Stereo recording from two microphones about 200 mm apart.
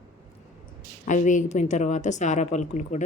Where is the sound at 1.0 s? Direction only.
40° left (ahead or behind).